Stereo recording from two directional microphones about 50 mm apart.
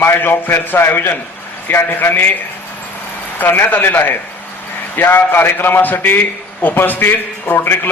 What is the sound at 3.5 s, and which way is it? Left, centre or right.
A man's voice, left.